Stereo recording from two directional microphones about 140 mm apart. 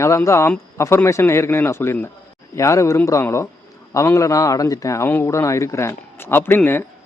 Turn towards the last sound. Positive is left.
turn(degrees=15)  # may be behind; listen again after turning